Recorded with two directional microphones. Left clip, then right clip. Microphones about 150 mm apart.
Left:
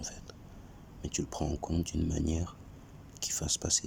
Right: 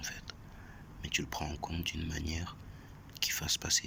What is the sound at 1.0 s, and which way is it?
Speech, 35° left (ahead or behind).